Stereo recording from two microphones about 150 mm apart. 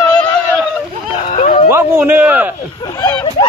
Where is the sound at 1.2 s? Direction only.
50° left (ahead or behind).